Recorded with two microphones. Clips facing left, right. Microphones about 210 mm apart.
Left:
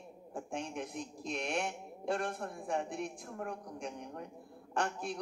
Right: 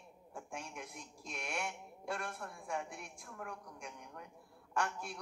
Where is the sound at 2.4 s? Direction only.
40° left (ahead or behind).